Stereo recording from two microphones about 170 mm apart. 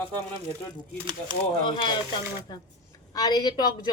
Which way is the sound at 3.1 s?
20° left (ahead or behind).